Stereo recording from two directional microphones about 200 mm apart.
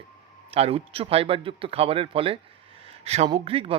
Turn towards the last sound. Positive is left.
turn(degrees=-30)  # may be behind; listen again after turning